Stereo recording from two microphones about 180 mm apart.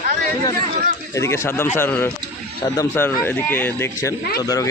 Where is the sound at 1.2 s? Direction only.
15° left (ahead or behind).